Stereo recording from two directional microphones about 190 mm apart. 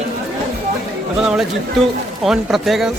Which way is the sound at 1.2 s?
Centre (ahead or behind).